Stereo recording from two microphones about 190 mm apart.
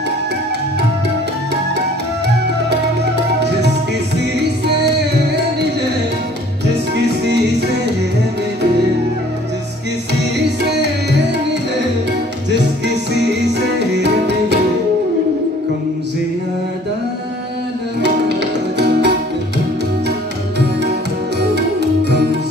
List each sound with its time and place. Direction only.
7.0 s music: 65° right (ahead or behind)
12.4 s music: 65° right (ahead or behind)
18.0 s music: 65° right (ahead or behind)